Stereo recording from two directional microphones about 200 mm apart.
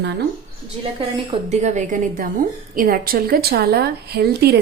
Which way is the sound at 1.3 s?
35° right (ahead or behind).